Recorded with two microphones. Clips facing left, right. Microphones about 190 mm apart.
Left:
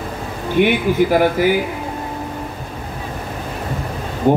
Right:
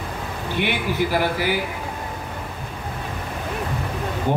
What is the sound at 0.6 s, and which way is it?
Speech, 50° left (ahead or behind).